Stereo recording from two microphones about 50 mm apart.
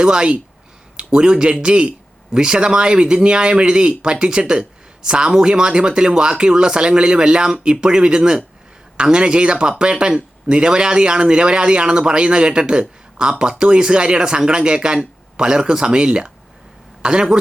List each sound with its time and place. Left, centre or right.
0.0 s speech: centre